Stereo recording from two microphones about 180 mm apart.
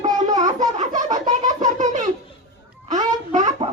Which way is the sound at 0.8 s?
40° right (ahead or behind).